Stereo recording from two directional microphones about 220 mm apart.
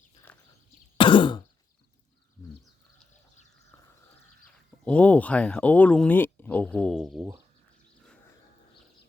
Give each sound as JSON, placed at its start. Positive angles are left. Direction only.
{"t": 0.3, "sound": "a sound", "side_deg": 5}
{"t": 0.9, "sound": "throat clearing", "side_deg": 20}
{"t": 4.9, "sound": "speech", "side_deg": 5}